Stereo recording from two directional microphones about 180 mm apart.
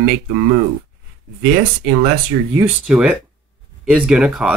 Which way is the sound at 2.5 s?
10° right (ahead or behind).